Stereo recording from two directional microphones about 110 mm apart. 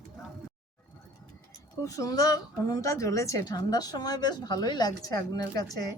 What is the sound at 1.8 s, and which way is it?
A woman's voice, 30° left (ahead or behind).